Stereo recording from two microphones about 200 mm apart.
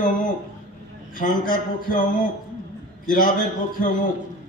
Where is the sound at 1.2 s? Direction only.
45° left (ahead or behind).